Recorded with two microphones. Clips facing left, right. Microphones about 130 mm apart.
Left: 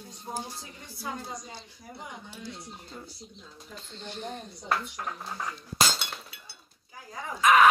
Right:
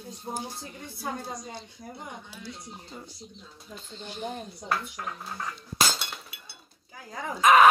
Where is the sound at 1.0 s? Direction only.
45° right (ahead or behind).